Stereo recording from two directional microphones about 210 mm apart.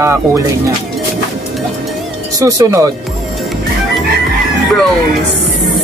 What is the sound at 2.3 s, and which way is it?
Speech, 15° right (ahead or behind).